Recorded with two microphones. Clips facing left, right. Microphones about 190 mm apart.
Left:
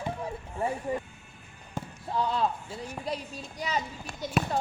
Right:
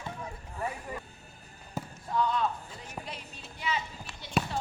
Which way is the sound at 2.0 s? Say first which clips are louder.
Left 1 dB; 30° left (ahead or behind).